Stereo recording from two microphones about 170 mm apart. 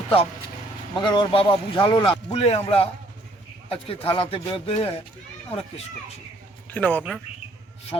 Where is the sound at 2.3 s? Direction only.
40° left (ahead or behind).